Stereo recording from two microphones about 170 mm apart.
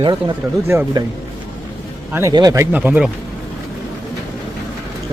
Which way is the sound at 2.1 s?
15° right (ahead or behind).